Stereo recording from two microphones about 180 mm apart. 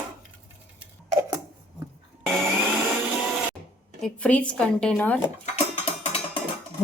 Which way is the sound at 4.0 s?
5° left (ahead or behind).